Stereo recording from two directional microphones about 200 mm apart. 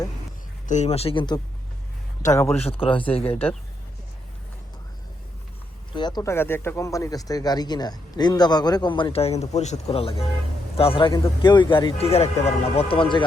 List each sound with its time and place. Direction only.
0.7 s speech: 35° left (ahead or behind); by 2.6 s 15° left (ahead or behind)
2.6 s speech: 30° left (ahead or behind)
5.9 s speech: 20° left (ahead or behind)